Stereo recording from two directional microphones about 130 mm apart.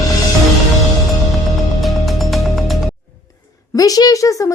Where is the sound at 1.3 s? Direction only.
Centre (ahead or behind).